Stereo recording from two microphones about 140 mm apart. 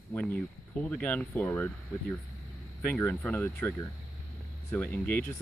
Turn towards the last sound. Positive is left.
turn(degrees=10)  # may be behind; listen again after turning